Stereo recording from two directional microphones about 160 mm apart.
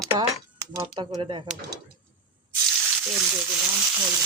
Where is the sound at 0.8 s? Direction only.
35° right (ahead or behind).